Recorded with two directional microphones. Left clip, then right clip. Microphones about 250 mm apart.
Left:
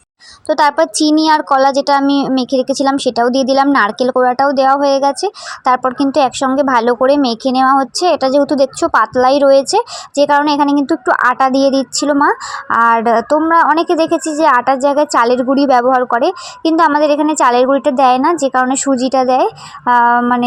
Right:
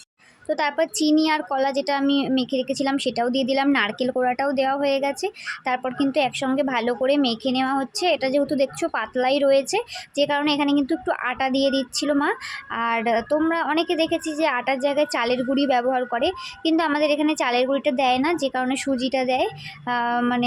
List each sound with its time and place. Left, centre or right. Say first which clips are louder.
1.0 s speech: left 9 dB; left
2.0 s speech: left 9 dB; centre
2.3 s a woman's voice: left 9 dB; left
4.2 s speech: left 11 dB; centre
4.5 s a woman's voice: left 11 dB; centre
7.6 s speech: left 15 dB; centre
7.9 s a woman's voice: left 9 dB; centre
12.1 s speech: left 11 dB; centre
12.7 s a woman's voice: left 12 dB; centre